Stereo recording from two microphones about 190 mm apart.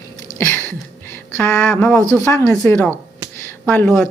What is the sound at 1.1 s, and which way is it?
Speech, 10° left (ahead or behind).